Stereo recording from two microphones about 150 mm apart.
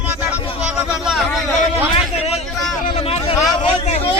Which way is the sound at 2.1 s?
45° left (ahead or behind).